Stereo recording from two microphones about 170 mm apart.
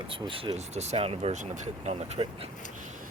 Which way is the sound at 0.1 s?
30° right (ahead or behind).